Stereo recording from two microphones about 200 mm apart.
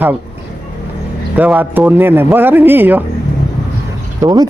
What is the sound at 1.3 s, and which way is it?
A man's voice, 10° right (ahead or behind).